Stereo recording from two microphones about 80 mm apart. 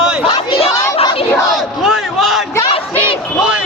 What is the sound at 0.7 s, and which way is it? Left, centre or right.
Child singing, left.